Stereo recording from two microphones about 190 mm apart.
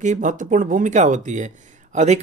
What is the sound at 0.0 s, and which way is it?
Speech, 40° right (ahead or behind).